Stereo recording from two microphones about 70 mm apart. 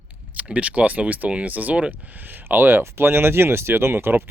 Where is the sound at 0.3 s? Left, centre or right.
Centre.